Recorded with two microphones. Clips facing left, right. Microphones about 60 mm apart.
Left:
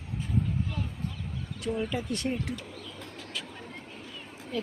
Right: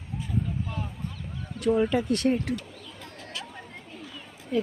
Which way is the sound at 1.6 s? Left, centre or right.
Right.